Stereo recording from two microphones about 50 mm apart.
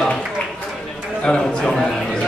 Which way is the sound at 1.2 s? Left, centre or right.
Centre.